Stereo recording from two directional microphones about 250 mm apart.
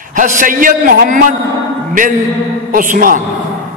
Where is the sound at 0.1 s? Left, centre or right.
Right.